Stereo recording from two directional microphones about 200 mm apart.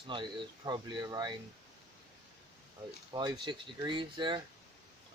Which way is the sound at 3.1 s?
20° right (ahead or behind).